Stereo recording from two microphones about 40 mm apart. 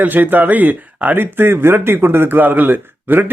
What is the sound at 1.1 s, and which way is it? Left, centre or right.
A man's voice, right.